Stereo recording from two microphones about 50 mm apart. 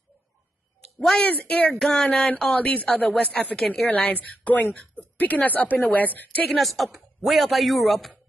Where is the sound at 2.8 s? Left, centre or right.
Left.